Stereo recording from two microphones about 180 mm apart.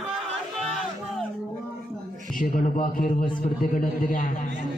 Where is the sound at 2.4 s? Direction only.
50° left (ahead or behind).